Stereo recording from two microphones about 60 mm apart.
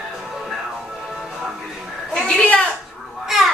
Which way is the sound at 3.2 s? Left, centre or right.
Centre.